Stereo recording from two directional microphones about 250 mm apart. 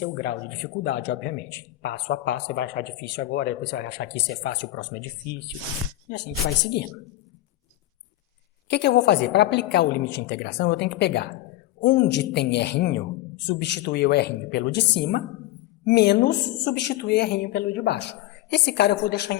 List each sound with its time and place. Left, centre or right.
0.2 s speech: left
8.7 s speech: left